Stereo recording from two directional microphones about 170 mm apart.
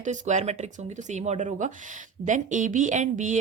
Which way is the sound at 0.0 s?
45° right (ahead or behind).